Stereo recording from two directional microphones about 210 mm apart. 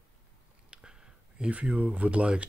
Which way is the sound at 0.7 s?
5° right (ahead or behind).